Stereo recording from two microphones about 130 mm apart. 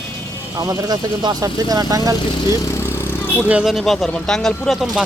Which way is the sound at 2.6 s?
20° left (ahead or behind).